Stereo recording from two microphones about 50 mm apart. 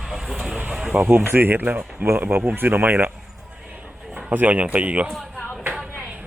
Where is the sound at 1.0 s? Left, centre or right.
Right.